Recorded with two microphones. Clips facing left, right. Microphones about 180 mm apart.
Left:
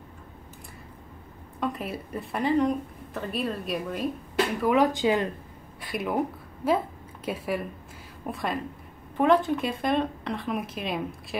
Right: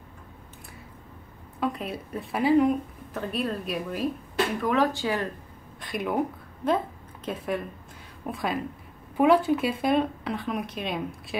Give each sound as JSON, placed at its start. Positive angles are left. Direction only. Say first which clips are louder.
{"t": 1.6, "sound": "speech", "louder": "right 1 dB", "side_deg": 0}
{"t": 4.6, "sound": "speech", "louder": "left 3 dB", "side_deg": 10}
{"t": 5.8, "sound": "speech", "louder": "even", "side_deg": 5}